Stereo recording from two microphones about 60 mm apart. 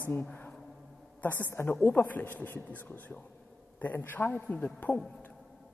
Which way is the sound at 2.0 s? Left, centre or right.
Left.